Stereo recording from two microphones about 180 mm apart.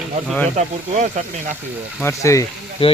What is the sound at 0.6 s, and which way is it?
Speech, 45° right (ahead or behind).